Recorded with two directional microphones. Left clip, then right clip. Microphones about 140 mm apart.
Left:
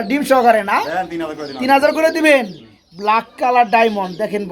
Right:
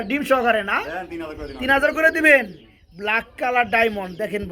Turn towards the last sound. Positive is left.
turn(degrees=5)  # may be behind; listen again after turning